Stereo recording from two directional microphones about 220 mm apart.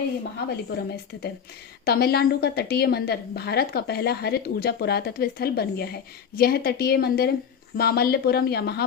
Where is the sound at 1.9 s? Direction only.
45° left (ahead or behind).